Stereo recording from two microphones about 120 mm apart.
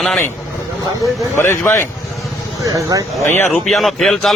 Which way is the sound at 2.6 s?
25° right (ahead or behind).